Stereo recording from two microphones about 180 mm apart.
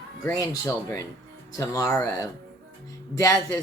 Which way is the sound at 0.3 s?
20° left (ahead or behind).